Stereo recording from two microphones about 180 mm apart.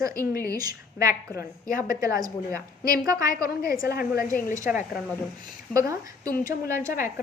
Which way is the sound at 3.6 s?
55° left (ahead or behind).